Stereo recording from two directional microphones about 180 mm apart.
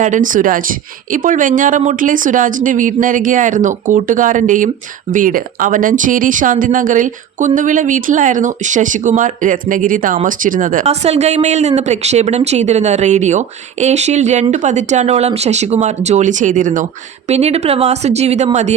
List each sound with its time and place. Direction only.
0.0 s speech: 45° right (ahead or behind)